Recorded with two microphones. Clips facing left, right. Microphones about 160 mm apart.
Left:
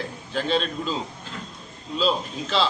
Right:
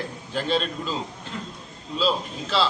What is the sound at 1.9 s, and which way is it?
Speech, 5° right (ahead or behind).